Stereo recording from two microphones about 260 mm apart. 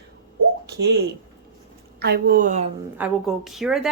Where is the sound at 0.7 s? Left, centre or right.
Right.